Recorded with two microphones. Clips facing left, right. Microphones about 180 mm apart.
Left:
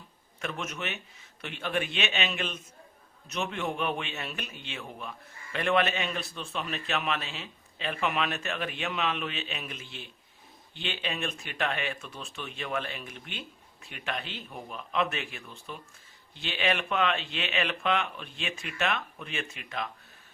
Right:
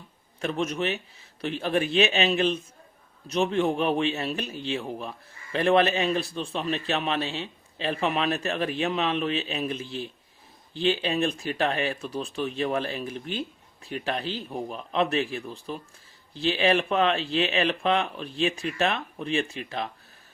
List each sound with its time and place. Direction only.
0.3 s a man's voice: 30° right (ahead or behind)